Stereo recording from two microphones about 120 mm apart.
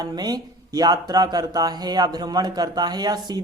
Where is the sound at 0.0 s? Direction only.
35° right (ahead or behind).